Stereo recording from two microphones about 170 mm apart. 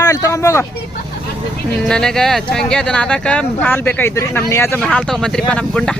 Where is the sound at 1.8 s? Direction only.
5° left (ahead or behind).